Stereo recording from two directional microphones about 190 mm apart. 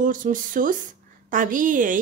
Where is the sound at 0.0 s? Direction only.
45° right (ahead or behind).